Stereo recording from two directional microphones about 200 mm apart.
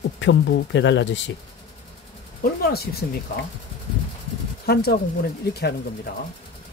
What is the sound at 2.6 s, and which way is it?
Speech, 50° left (ahead or behind).